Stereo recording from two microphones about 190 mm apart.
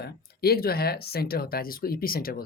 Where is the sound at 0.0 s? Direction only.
55° left (ahead or behind).